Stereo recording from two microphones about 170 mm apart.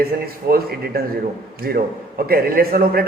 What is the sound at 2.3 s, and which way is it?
Speech, 60° right (ahead or behind).